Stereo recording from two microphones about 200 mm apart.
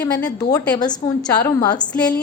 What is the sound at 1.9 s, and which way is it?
Speech, 5° left (ahead or behind).